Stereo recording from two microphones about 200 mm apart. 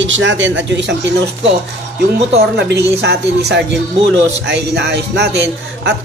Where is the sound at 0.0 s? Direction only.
70° right (ahead or behind).